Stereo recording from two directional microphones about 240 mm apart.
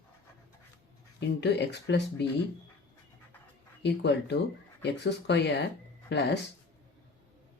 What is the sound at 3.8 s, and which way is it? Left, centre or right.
Speech, left.